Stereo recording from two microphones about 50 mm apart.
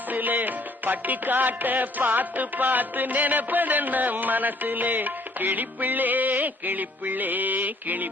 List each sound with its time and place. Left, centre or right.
0.1 s music: right